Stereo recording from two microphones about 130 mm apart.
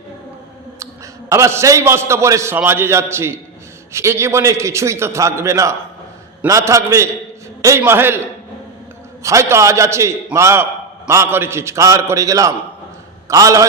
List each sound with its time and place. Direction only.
1.3 s a man's voice: 20° right (ahead or behind)
9.2 s a man's voice: 25° right (ahead or behind)